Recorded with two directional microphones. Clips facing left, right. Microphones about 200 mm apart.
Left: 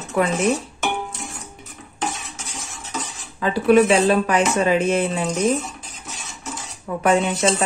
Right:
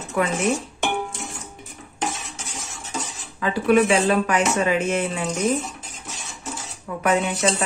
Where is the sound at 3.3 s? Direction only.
30° left (ahead or behind).